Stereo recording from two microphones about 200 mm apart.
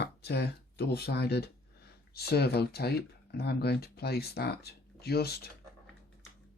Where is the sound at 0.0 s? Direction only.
55° left (ahead or behind).